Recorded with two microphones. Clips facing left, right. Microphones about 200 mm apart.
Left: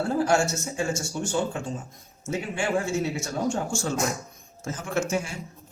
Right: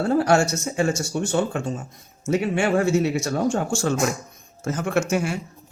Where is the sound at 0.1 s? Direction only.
70° right (ahead or behind).